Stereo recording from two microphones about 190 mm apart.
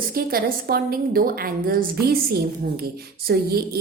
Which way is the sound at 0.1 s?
50° right (ahead or behind).